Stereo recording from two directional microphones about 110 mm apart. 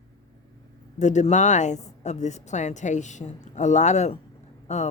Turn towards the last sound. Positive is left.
turn(degrees=90)